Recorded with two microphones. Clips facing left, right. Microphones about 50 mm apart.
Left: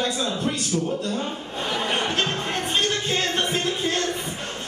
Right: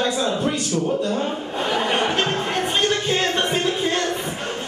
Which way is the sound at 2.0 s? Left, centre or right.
Centre.